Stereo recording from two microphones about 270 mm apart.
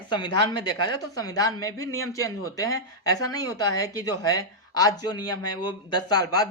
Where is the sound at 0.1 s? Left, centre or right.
Centre.